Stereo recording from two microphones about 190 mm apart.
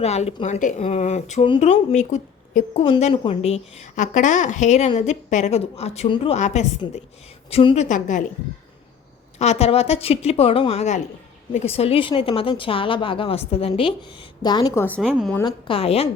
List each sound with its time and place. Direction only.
0.0 s speech: 35° left (ahead or behind)
7.9 s speech: 40° left (ahead or behind)
9.4 s speech: 35° left (ahead or behind)
14.8 s a woman's voice: 5° left (ahead or behind)
15.4 s speech: 25° left (ahead or behind)